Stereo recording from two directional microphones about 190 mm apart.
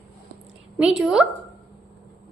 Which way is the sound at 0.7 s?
5° right (ahead or behind).